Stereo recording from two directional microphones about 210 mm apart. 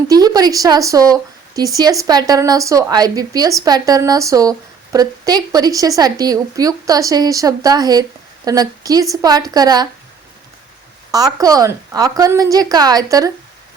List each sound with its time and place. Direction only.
0.1 s a woman's voice: 20° right (ahead or behind)
11.1 s a woman's voice: 15° right (ahead or behind)